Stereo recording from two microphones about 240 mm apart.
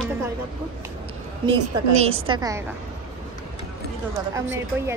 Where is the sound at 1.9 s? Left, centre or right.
Right.